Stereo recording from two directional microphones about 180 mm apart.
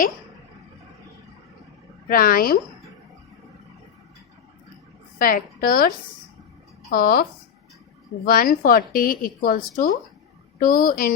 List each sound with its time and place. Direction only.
2.0 s a woman's voice: 50° left (ahead or behind)
5.2 s a woman's voice: 55° left (ahead or behind)
6.9 s a woman's voice: 55° left (ahead or behind)